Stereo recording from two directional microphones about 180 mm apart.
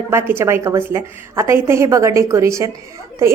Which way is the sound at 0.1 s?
15° right (ahead or behind).